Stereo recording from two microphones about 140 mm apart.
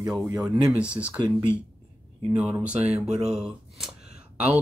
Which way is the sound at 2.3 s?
10° right (ahead or behind).